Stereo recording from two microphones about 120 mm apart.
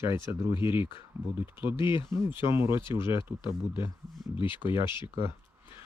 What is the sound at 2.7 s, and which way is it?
Speech, 40° left (ahead or behind).